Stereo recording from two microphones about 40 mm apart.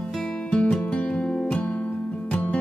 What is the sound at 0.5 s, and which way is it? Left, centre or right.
Music, left.